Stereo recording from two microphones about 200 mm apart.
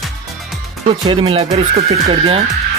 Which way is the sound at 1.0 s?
25° right (ahead or behind).